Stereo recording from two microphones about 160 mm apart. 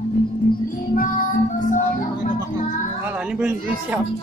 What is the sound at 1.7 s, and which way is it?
Music, 55° left (ahead or behind).